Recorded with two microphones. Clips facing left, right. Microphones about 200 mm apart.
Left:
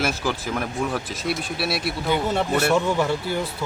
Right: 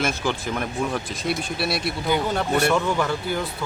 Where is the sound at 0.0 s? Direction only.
5° left (ahead or behind).